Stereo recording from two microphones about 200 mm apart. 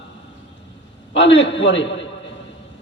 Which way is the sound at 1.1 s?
65° left (ahead or behind).